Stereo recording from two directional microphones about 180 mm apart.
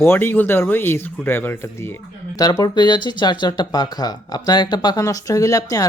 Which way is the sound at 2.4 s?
20° left (ahead or behind).